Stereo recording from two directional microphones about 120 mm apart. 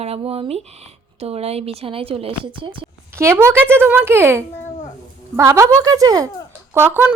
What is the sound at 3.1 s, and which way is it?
A woman's voice, 20° right (ahead or behind).